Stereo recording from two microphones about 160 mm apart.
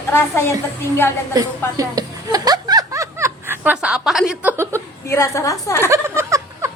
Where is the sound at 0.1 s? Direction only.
15° left (ahead or behind).